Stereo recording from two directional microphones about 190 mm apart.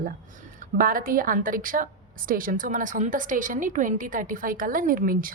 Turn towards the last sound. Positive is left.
turn(degrees=-50)  # may be behind; listen again after turning